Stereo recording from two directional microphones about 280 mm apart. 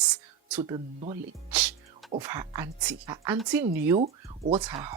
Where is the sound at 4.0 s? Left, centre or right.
Right.